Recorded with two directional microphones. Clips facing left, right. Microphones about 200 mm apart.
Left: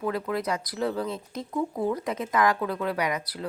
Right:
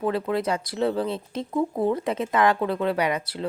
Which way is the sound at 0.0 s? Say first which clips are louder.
Right 4 dB; 30° right (ahead or behind).